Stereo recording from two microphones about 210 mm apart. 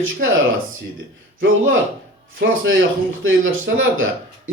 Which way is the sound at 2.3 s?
65° right (ahead or behind).